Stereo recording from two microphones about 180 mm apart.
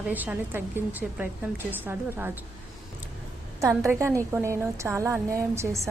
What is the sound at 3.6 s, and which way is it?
A woman's voice, 15° right (ahead or behind).